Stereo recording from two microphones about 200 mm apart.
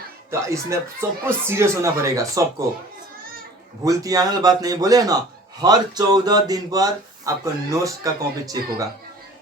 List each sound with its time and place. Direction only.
0.3 s a man's voice: 15° right (ahead or behind)
3.8 s a man's voice: 15° right (ahead or behind)